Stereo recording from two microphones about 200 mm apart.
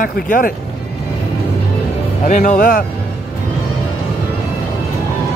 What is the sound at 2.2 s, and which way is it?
Speech, 40° left (ahead or behind).